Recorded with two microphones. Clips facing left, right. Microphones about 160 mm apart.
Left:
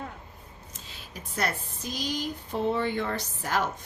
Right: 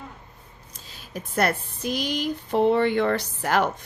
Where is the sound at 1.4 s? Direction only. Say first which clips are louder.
Right 7 dB; 60° right (ahead or behind).